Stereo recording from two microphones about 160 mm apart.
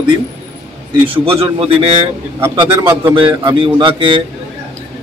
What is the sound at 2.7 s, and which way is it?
Speech, 15° right (ahead or behind).